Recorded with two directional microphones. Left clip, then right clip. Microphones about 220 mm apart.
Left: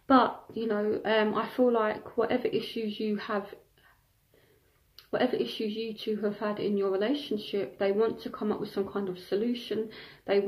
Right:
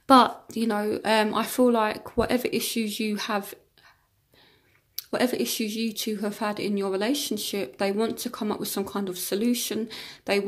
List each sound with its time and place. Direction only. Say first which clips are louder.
0.0 s speech: right 6 dB; 40° right (ahead or behind)
4.9 s speech: right 2 dB; 40° right (ahead or behind)